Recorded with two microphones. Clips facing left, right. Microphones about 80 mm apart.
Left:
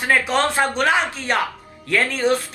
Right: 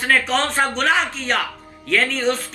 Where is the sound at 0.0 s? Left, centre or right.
Centre.